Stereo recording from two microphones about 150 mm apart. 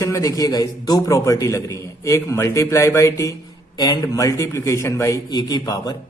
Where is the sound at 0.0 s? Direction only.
20° left (ahead or behind).